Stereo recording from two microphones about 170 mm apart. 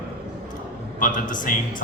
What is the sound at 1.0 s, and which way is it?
Speech, 50° left (ahead or behind).